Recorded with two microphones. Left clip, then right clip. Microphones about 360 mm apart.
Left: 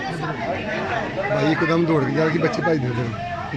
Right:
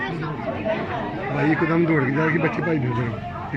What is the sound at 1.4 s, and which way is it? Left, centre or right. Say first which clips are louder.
Speech: right 2 dB; centre.